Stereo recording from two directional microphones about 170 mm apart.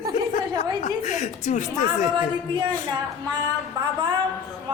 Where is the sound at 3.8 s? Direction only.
25° right (ahead or behind).